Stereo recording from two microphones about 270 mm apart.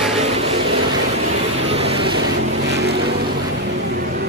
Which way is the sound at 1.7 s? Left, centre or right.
Right.